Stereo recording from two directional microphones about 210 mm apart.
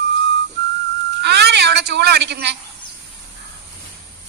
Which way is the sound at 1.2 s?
55° right (ahead or behind).